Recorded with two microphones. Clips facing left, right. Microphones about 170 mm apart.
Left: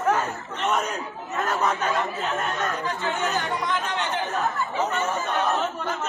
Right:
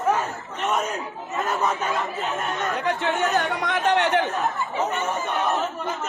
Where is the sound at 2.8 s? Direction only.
75° right (ahead or behind).